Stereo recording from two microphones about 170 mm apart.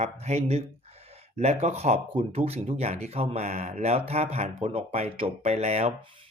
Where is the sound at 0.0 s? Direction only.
40° right (ahead or behind).